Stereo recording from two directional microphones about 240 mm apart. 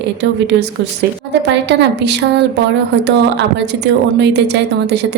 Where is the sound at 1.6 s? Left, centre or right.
Right.